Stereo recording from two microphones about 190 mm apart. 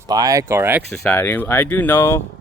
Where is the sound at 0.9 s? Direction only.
5° left (ahead or behind).